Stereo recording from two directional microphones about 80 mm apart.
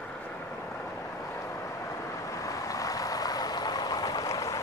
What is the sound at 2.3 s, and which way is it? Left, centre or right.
Vehicle, left.